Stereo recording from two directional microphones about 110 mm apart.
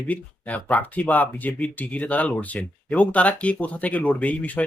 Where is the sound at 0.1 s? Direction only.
15° left (ahead or behind).